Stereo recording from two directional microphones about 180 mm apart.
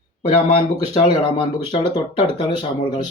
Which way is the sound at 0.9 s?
25° left (ahead or behind).